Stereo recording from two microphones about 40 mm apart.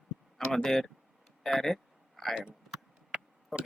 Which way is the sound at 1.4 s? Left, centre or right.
Centre.